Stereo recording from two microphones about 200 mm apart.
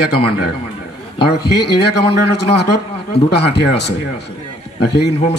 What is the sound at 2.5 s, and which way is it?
Speech, 55° left (ahead or behind).